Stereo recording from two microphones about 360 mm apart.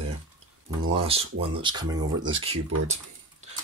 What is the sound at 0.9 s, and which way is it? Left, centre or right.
Speech, centre.